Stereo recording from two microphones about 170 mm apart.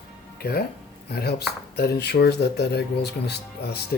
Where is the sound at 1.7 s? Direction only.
70° left (ahead or behind).